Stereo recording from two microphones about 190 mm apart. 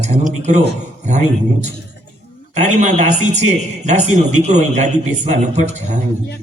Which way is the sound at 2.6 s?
40° right (ahead or behind).